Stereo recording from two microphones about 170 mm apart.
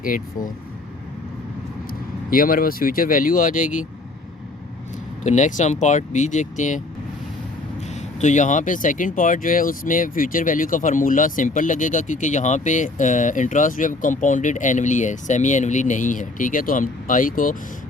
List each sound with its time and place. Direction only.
1.9 s speech: 55° left (ahead or behind)
5.2 s speech: 45° left (ahead or behind)
7.9 s speech: 45° left (ahead or behind)